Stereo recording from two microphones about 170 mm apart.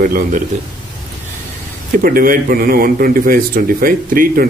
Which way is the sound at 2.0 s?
55° right (ahead or behind).